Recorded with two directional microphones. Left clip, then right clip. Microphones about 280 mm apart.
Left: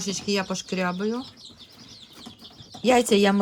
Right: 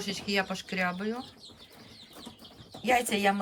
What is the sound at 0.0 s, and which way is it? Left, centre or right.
Speech, centre.